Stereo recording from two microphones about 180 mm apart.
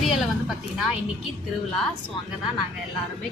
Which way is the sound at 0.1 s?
Centre (ahead or behind).